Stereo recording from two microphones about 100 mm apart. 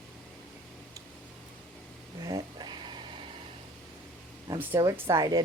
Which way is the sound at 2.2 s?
40° right (ahead or behind).